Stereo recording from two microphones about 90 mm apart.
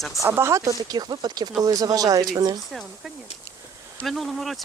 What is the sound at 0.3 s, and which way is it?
Speech, 30° right (ahead or behind).